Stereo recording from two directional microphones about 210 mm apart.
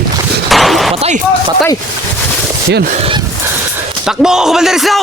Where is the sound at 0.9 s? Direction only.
30° right (ahead or behind).